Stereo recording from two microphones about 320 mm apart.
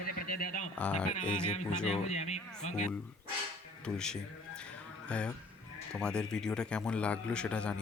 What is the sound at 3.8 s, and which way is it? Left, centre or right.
A man's voice, centre.